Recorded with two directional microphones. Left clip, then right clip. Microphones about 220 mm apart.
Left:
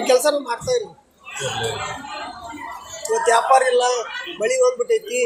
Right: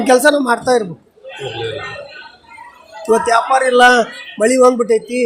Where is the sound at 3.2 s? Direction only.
20° right (ahead or behind).